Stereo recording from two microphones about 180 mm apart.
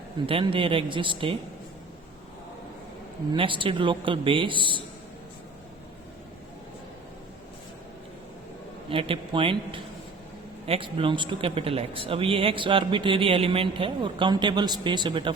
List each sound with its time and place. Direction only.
0.3 s a man's voice: 30° right (ahead or behind)
3.3 s a man's voice: 30° right (ahead or behind)
8.9 s a man's voice: 30° right (ahead or behind)